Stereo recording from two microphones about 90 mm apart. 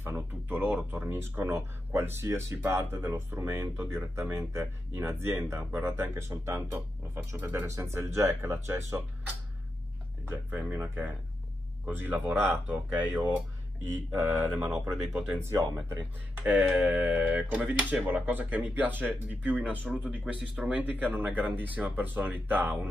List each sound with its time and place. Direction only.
0.0 s a sound: 25° right (ahead or behind)
0.9 s speech: 25° right (ahead or behind)
16.3 s speech: 20° right (ahead or behind)